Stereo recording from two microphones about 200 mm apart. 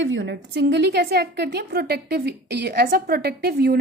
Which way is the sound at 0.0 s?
65° right (ahead or behind).